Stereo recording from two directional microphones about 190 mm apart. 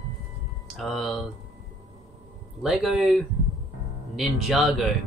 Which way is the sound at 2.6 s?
Centre (ahead or behind).